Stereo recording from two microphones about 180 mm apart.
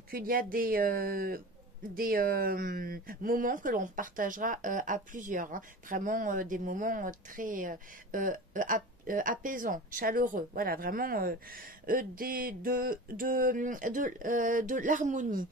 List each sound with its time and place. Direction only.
0.1 s speech: 50° right (ahead or behind)